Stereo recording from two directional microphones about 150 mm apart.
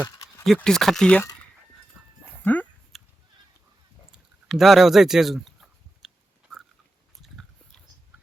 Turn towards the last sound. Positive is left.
turn(degrees=5)  # may be behind; listen again after turning